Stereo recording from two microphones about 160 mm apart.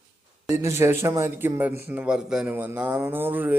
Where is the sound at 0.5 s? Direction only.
15° right (ahead or behind).